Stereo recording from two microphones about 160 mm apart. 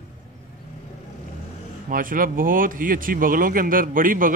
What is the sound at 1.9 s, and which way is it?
A man's voice, 60° right (ahead or behind).